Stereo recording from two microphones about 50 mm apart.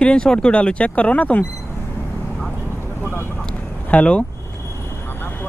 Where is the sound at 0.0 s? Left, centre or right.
Centre.